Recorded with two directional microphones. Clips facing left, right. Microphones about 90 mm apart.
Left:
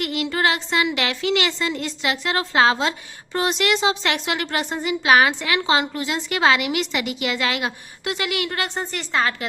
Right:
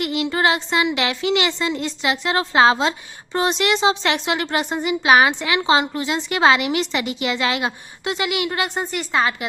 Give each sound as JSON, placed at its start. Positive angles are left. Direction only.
{"t": 0.0, "sound": "a woman's voice", "side_deg": -20}